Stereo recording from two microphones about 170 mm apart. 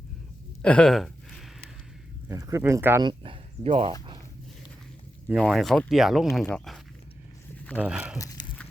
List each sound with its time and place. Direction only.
0.6 s a sound: 5° left (ahead or behind)
2.3 s speech: 20° right (ahead or behind)
3.0 s speech: 30° right (ahead or behind)
5.3 s speech: centre (ahead or behind)
7.8 s speech: 5° right (ahead or behind)
8.2 s dog: 20° left (ahead or behind)